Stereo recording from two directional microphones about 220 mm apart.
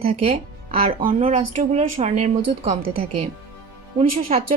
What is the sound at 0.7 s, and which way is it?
A woman's voice, 40° right (ahead or behind).